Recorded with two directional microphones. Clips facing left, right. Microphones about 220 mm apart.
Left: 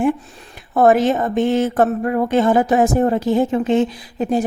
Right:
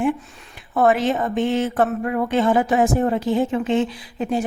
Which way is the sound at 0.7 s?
40° left (ahead or behind).